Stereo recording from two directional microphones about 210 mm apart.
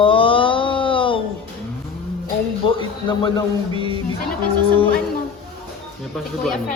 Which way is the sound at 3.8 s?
25° right (ahead or behind).